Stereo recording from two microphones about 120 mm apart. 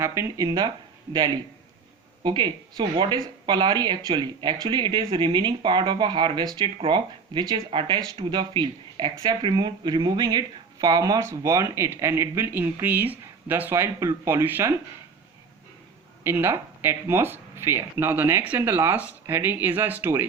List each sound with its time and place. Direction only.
0.0 s speech: 20° right (ahead or behind)
2.2 s speech: 40° right (ahead or behind); by 14.8 s 20° right (ahead or behind)
16.2 s speech: 20° right (ahead or behind)